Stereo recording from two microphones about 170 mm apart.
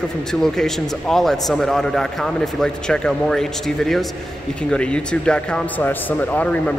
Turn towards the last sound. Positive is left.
turn(degrees=10)  # may be behind; listen again after turning